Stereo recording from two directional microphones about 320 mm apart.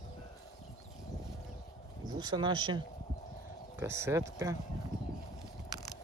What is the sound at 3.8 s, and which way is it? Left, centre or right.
Speech, centre.